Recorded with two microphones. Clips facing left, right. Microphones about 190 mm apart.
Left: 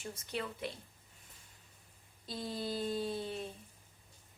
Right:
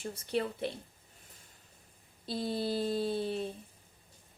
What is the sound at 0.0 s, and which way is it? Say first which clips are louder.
Speech: right 7 dB; 35° right (ahead or behind).